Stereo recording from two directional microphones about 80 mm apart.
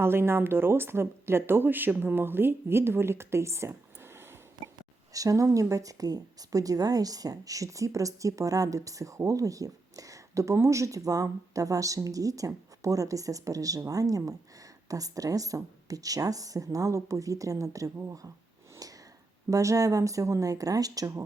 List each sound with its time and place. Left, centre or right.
0.0 s speech: right
5.1 s a woman's voice: right
19.5 s a woman's voice: right